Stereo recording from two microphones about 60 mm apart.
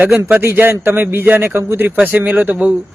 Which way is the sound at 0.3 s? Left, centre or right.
Right.